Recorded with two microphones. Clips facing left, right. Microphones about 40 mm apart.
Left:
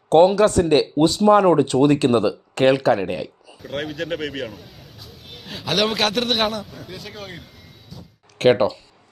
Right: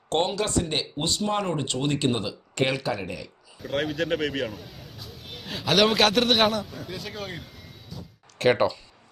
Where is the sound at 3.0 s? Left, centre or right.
Left.